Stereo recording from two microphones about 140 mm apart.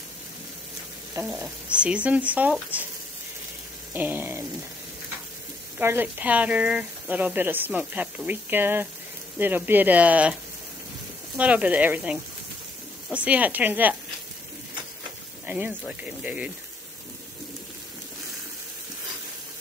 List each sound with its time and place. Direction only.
1.1 s a sound: 20° right (ahead or behind)
1.7 s speech: 10° right (ahead or behind)
3.9 s a sound: 15° right (ahead or behind)
5.8 s speech: 15° right (ahead or behind)
11.3 s speech: 10° right (ahead or behind)
15.4 s speech: 10° right (ahead or behind)